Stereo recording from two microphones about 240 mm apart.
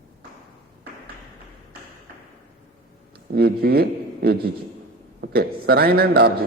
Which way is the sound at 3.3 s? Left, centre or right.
Right.